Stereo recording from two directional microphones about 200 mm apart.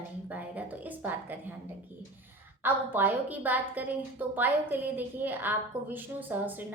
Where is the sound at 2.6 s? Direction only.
10° right (ahead or behind).